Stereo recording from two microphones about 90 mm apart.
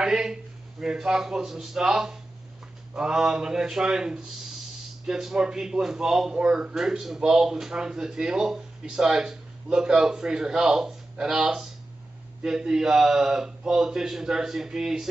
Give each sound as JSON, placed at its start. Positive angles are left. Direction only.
{"t": 0.0, "sound": "a man's voice", "side_deg": -5}